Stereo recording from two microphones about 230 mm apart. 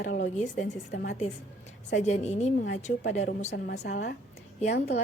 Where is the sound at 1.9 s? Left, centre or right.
Left.